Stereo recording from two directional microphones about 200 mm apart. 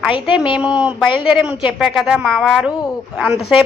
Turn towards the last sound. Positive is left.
turn(degrees=-5)  # may be behind; listen again after turning